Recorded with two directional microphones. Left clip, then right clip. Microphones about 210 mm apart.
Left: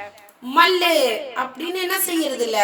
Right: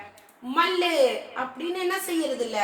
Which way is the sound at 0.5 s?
50° left (ahead or behind).